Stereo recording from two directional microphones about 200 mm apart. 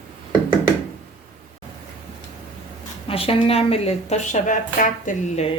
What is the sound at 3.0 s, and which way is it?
A woman's voice, 30° left (ahead or behind).